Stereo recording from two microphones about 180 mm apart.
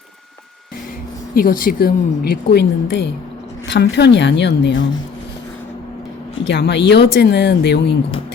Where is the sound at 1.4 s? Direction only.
50° left (ahead or behind); by 4.8 s 75° left (ahead or behind).